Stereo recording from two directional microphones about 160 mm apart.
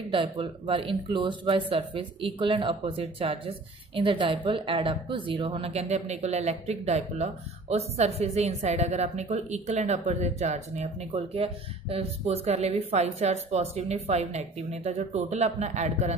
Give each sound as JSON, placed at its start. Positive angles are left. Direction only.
{"t": 0.1, "sound": "a woman's voice", "side_deg": -35}